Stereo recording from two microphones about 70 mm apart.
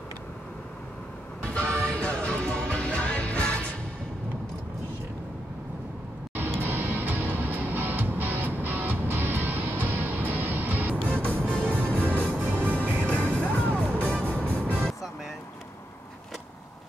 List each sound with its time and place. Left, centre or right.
1.4 s music: centre
6.3 s music: right
11.5 s music: centre
12.4 s music: right
13.0 s music: centre
14.0 s music: right